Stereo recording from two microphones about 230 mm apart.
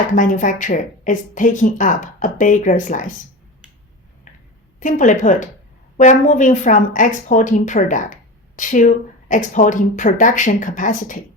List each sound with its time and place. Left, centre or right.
0.1 s speech: left
4.8 s speech: left